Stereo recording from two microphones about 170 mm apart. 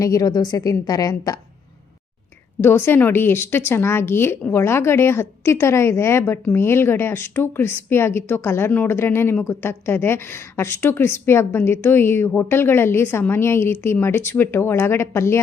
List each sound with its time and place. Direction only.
0.0 s a woman's voice: 20° left (ahead or behind)
2.6 s a woman's voice: 15° left (ahead or behind)